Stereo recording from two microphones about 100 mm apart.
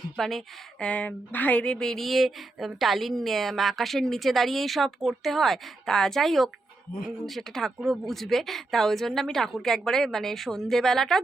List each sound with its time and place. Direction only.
0.2 s speech: 5° left (ahead or behind)
0.9 s speech: 15° left (ahead or behind)